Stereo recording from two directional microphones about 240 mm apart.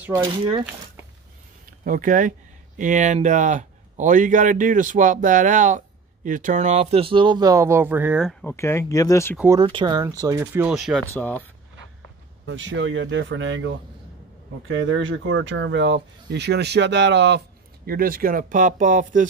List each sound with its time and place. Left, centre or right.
0.1 s a man's voice: centre
1.7 s a man's voice: right; by 9.4 s centre
9.4 s speech: centre
12.4 s speech: right